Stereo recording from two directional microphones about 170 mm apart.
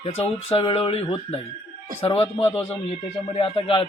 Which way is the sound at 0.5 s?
30° left (ahead or behind).